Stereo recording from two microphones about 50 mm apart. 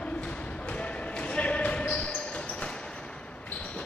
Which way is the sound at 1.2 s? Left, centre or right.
Left.